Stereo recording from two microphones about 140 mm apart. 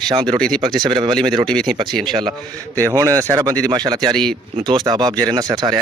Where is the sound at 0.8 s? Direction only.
35° right (ahead or behind).